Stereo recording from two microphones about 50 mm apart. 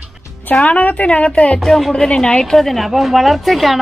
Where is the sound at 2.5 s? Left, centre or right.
Centre.